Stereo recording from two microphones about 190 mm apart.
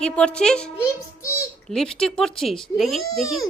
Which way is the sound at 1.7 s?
5° left (ahead or behind).